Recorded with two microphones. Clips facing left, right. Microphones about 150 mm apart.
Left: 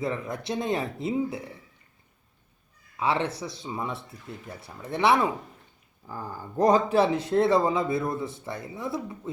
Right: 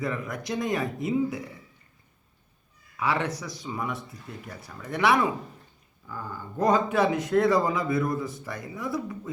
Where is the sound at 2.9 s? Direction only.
25° left (ahead or behind).